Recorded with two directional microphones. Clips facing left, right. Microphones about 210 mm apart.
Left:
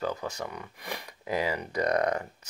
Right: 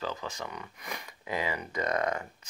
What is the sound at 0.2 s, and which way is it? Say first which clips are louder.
Speech: left 3 dB; 35° left (ahead or behind).